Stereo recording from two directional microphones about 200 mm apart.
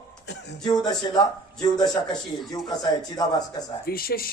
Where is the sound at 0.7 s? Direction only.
20° left (ahead or behind).